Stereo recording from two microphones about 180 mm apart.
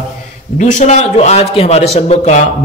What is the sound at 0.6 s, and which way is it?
A man's voice, 40° left (ahead or behind).